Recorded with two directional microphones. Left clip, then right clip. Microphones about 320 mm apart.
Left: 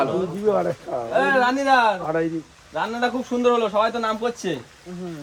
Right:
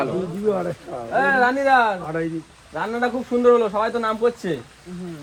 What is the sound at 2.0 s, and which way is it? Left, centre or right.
Speech, left.